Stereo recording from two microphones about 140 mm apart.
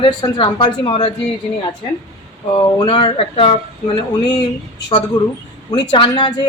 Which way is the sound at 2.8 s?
40° left (ahead or behind).